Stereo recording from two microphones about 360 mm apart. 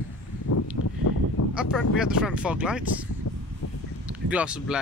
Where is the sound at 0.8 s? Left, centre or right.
Left.